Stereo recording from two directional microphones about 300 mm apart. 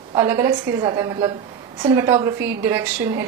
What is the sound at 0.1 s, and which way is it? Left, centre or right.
A woman's voice, centre.